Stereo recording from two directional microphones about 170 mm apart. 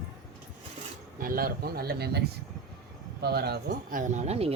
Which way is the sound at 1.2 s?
60° right (ahead or behind).